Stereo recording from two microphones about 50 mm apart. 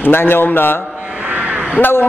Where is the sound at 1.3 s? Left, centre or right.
Right.